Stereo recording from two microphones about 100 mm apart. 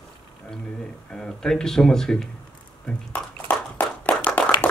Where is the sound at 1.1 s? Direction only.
5° left (ahead or behind).